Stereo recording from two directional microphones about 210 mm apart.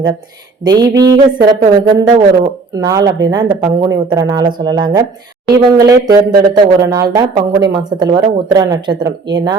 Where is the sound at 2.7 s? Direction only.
15° right (ahead or behind).